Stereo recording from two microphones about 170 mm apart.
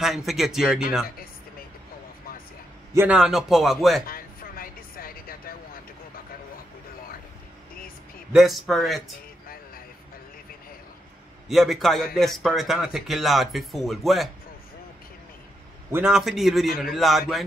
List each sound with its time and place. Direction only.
0.0 s speech: centre (ahead or behind)
2.9 s speech: 10° right (ahead or behind)
4.1 s vehicle: 60° left (ahead or behind)
8.3 s speech: centre (ahead or behind)
11.4 s speech: centre (ahead or behind)
15.9 s speech: 5° right (ahead or behind)
16.6 s a man's voice: 60° left (ahead or behind)
16.9 s speech: centre (ahead or behind)